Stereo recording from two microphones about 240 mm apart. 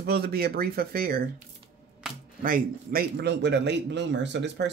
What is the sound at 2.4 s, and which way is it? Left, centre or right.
A man's voice, right.